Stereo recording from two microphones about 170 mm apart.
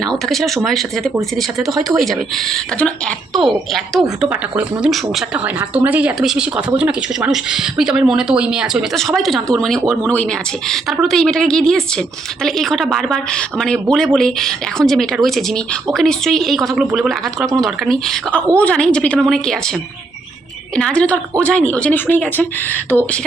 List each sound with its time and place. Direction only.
0.0 s a woman's voice: centre (ahead or behind)